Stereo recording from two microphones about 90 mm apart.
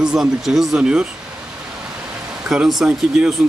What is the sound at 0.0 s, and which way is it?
Speech, 5° right (ahead or behind).